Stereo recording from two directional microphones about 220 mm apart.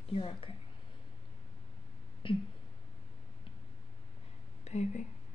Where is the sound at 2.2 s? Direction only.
20° left (ahead or behind).